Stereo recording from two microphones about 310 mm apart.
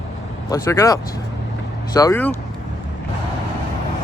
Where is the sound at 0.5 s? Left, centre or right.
Centre.